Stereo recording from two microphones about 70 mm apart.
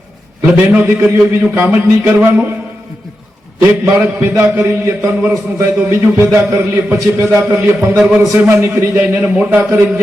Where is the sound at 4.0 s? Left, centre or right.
Right.